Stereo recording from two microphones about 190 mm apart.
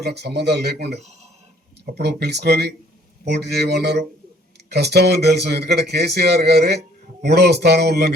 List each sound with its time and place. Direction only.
0.0 s speech: 60° right (ahead or behind)
0.9 s speech: 35° right (ahead or behind)
1.8 s speech: 55° right (ahead or behind)